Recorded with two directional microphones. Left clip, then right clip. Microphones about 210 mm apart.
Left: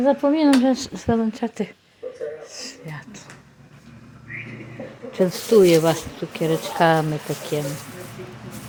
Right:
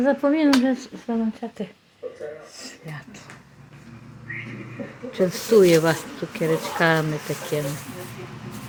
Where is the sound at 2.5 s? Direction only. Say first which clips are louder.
Left 3 dB; 15° left (ahead or behind).